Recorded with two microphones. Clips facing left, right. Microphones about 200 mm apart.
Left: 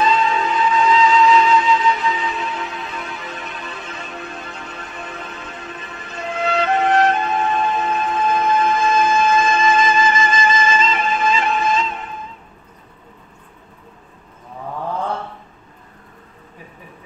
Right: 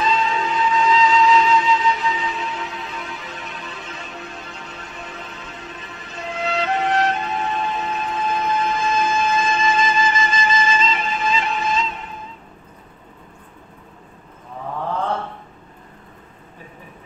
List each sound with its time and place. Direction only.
0.0 s music: 55° left (ahead or behind)